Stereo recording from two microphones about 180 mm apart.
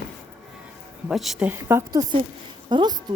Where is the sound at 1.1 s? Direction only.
Centre (ahead or behind).